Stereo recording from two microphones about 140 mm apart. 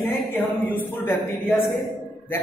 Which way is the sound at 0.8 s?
15° left (ahead or behind).